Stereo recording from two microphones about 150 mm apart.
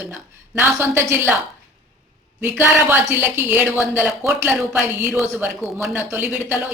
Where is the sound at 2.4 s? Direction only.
15° right (ahead or behind).